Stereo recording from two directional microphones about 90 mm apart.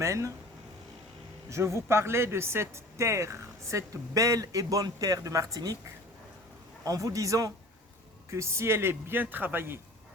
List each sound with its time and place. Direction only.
0.0 s a man's voice: 35° right (ahead or behind)
1.5 s a man's voice: 30° right (ahead or behind)
6.8 s a man's voice: 40° right (ahead or behind); by 9.8 s 25° right (ahead or behind)